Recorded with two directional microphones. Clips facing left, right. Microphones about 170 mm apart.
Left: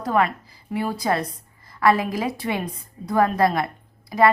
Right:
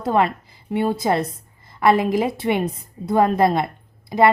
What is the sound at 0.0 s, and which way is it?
A woman's voice, 25° right (ahead or behind).